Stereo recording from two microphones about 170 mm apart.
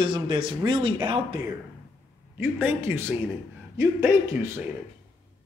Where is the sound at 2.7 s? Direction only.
15° right (ahead or behind).